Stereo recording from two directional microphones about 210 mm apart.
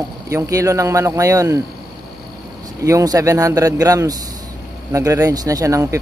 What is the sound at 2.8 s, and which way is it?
Speech, 15° right (ahead or behind).